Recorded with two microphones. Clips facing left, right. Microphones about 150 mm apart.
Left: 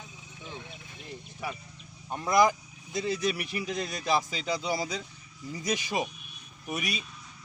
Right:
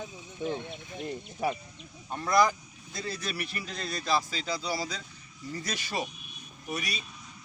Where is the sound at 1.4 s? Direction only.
40° right (ahead or behind).